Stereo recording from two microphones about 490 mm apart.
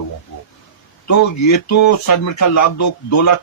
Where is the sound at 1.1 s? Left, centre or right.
Left.